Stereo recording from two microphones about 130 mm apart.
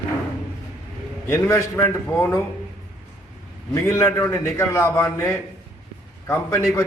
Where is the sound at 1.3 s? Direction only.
20° left (ahead or behind).